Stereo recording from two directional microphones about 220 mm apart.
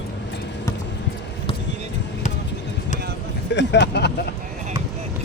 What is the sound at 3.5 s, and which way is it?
Speech, 55° left (ahead or behind).